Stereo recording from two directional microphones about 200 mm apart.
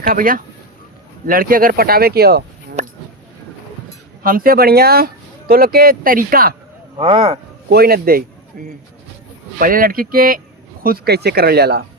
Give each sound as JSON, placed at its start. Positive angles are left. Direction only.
{"t": 0.1, "sound": "speech", "side_deg": -45}
{"t": 2.8, "sound": "speech", "side_deg": -35}
{"t": 4.2, "sound": "speech", "side_deg": -45}
{"t": 7.0, "sound": "speech", "side_deg": -30}
{"t": 7.7, "sound": "speech", "side_deg": -50}
{"t": 9.6, "sound": "speech", "side_deg": -45}